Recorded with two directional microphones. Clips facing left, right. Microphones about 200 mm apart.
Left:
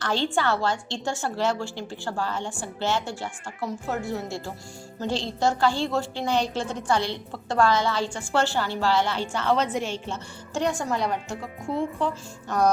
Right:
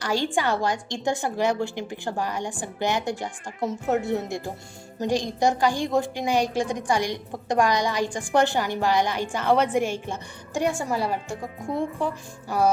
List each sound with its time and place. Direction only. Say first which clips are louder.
0.0 s a woman's voice: right 1 dB; 15° right (ahead or behind)